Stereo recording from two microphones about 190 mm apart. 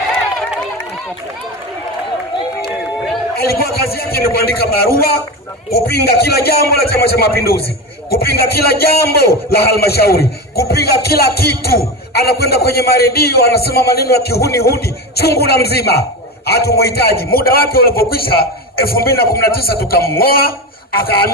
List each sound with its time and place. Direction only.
3.3 s a man's voice: 55° left (ahead or behind)